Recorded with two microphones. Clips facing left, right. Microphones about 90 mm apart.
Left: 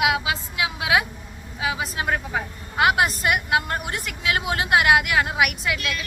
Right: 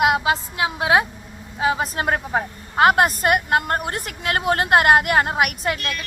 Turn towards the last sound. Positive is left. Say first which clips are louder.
# right 2 dB
turn(degrees=-45)  # may be behind; listen again after turning